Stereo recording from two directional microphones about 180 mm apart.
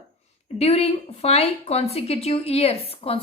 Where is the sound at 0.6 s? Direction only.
35° left (ahead or behind).